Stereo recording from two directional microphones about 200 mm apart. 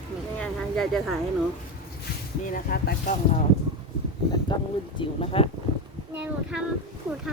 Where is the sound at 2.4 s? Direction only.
45° left (ahead or behind).